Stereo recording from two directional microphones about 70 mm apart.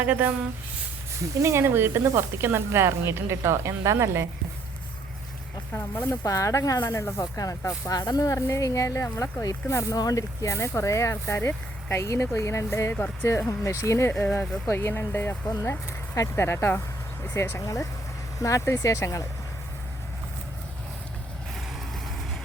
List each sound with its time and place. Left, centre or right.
0.0 s speech: right
1.4 s speech: right
5.7 s speech: left
6.2 s speech: left
7.9 s speech: left
8.4 s speech: left
9.4 s speech: left
17.6 s speech: left